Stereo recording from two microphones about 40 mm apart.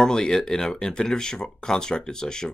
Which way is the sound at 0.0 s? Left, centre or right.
Centre.